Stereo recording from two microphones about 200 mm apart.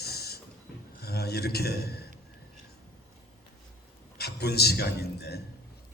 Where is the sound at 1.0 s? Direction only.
50° left (ahead or behind).